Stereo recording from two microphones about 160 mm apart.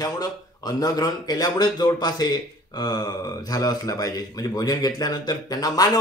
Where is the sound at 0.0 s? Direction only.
25° left (ahead or behind).